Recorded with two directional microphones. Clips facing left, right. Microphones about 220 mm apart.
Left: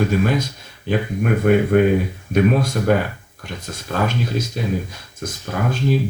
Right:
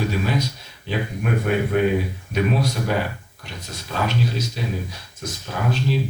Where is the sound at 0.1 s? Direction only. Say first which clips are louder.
Left 5 dB; 50° left (ahead or behind).